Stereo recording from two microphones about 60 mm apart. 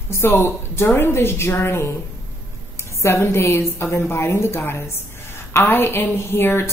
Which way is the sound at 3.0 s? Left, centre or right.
Left.